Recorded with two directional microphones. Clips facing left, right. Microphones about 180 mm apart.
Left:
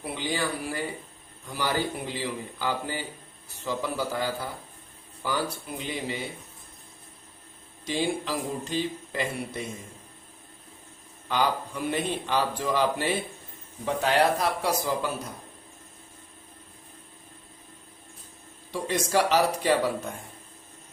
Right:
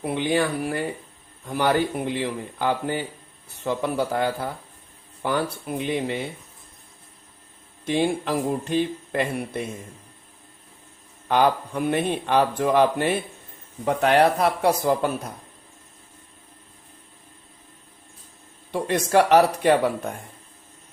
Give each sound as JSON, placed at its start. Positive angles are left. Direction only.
{"t": 0.0, "sound": "speech", "side_deg": -55}
{"t": 7.9, "sound": "speech", "side_deg": -55}
{"t": 11.3, "sound": "speech", "side_deg": -55}
{"t": 18.7, "sound": "speech", "side_deg": -55}